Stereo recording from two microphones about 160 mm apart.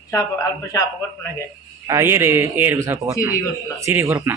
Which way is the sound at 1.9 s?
20° right (ahead or behind).